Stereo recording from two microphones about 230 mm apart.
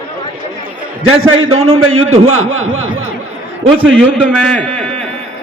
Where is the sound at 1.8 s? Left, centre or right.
Right.